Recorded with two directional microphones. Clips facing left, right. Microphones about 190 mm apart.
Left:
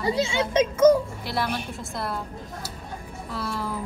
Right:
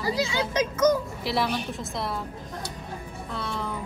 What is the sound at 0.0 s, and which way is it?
A child's voice, 25° left (ahead or behind).